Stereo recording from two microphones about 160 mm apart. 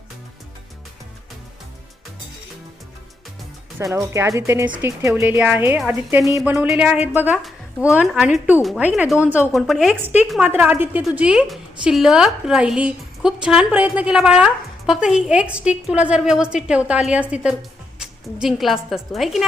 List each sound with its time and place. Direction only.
3.9 s speech: 20° right (ahead or behind)
6.2 s a woman's voice: centre (ahead or behind)
9.9 s speech: 10° right (ahead or behind)
10.2 s a woman's voice: centre (ahead or behind)
10.5 s a woman's voice: 10° right (ahead or behind)